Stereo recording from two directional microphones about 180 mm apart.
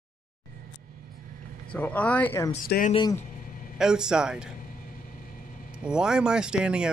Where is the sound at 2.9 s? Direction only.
25° left (ahead or behind).